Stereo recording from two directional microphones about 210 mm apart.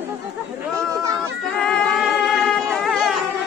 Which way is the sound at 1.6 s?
Centre (ahead or behind).